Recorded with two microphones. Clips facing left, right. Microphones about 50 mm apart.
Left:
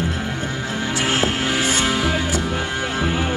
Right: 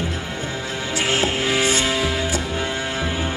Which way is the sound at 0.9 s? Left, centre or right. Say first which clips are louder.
Even; left.